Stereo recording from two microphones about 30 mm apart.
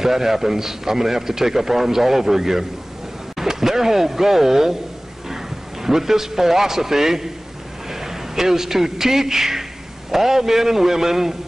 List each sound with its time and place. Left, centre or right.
0.0 s a man's voice: centre